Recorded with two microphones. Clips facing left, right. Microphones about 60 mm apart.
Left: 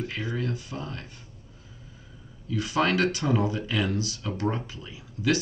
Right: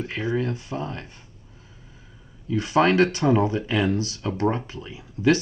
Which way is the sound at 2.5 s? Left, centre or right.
Right.